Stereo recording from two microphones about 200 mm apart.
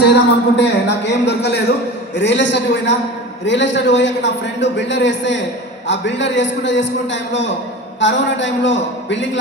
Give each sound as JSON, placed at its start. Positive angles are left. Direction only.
{"t": 0.0, "sound": "a man's voice", "side_deg": 60}